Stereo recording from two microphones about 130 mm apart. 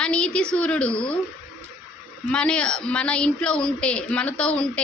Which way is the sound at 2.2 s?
5° left (ahead or behind).